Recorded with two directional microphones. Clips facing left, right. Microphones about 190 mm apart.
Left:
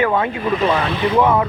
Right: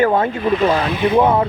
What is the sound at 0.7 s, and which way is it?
Speech, 30° right (ahead or behind).